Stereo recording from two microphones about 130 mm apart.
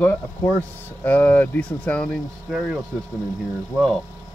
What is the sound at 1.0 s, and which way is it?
Speech, 10° left (ahead or behind).